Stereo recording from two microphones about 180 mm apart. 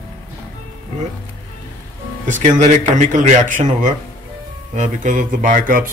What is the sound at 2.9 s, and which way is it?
Speech, 45° right (ahead or behind).